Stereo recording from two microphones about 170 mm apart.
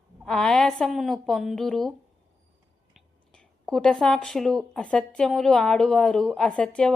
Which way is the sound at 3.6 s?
5° left (ahead or behind).